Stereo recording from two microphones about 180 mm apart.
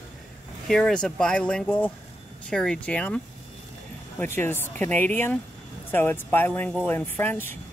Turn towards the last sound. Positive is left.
turn(degrees=10)  # may be behind; listen again after turning